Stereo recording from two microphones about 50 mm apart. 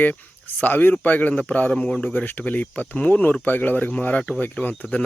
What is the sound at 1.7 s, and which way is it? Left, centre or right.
Speech, centre.